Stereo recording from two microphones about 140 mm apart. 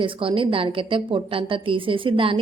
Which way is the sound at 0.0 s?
40° right (ahead or behind).